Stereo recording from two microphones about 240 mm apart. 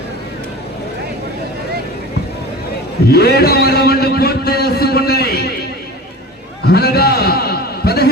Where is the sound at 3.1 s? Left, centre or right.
Left.